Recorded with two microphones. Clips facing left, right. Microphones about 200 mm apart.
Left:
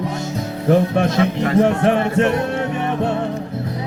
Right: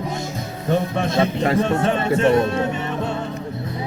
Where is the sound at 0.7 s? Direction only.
75° left (ahead or behind).